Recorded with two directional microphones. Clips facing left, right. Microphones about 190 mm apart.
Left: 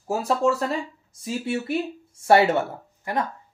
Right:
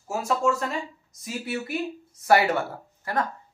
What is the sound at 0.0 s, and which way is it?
Speech, 35° left (ahead or behind).